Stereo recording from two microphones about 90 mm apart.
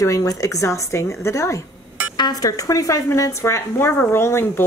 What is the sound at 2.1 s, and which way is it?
Speech, 45° left (ahead or behind).